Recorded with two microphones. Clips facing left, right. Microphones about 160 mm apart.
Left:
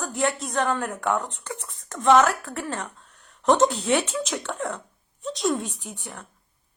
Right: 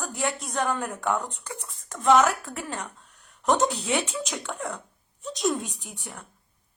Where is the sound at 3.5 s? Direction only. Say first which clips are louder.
Left 4 dB; centre (ahead or behind).